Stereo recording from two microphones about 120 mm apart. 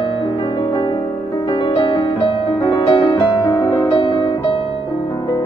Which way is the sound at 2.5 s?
30° left (ahead or behind).